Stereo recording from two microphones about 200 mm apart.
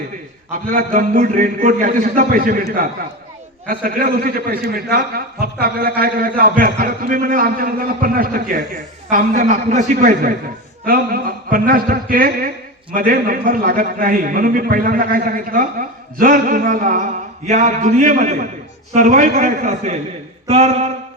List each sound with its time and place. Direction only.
0.7 s a man's voice: 40° right (ahead or behind)